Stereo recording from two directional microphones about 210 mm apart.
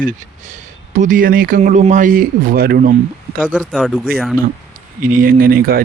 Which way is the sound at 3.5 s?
Centre (ahead or behind).